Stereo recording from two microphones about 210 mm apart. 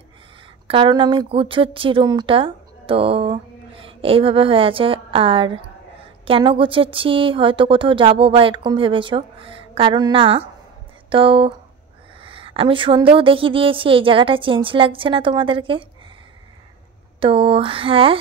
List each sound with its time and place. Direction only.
0.7 s speech: 25° right (ahead or behind)
17.2 s speech: 25° right (ahead or behind)